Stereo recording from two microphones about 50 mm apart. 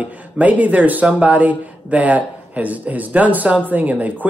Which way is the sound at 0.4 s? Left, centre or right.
Right.